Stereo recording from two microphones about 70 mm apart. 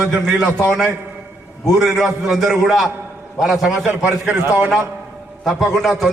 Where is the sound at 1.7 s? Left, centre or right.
Centre.